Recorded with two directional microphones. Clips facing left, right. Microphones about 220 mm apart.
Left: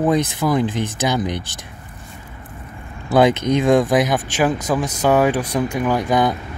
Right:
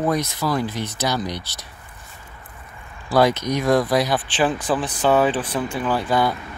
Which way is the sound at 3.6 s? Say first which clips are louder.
Left 3 dB; 15° left (ahead or behind).